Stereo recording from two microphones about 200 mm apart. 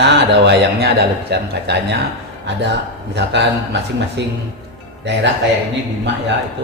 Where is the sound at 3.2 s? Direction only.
60° right (ahead or behind).